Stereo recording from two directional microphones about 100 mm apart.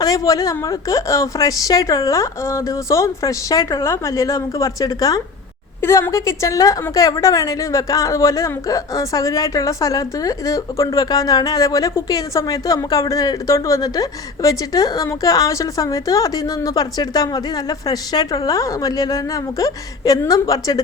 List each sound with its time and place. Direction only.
0.0 s a woman's voice: 40° left (ahead or behind)